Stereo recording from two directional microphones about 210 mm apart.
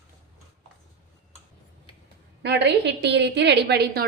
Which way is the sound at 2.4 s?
55° right (ahead or behind).